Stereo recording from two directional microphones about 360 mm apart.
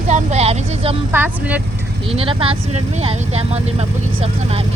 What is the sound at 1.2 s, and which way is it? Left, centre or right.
Speech, centre.